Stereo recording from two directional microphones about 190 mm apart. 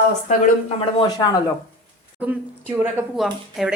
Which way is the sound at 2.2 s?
5° right (ahead or behind).